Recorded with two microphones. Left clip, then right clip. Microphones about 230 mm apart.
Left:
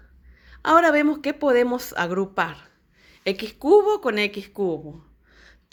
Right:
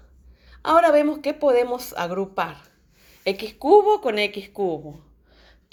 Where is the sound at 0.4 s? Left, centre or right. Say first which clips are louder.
Even; left.